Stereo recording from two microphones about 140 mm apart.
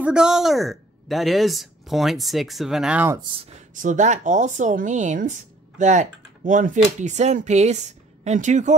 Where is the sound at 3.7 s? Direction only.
65° right (ahead or behind).